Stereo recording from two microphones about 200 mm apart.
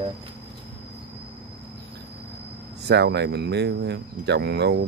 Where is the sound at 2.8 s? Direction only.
55° right (ahead or behind).